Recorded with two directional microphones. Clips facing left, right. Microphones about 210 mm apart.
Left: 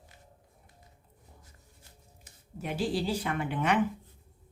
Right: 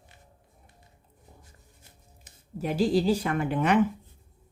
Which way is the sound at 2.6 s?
40° right (ahead or behind).